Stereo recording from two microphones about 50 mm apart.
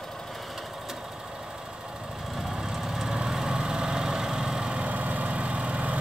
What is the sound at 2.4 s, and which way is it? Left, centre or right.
Lawn mower, centre.